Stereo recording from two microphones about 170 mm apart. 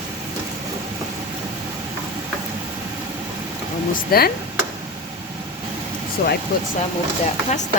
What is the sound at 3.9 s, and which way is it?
Speech, 60° left (ahead or behind).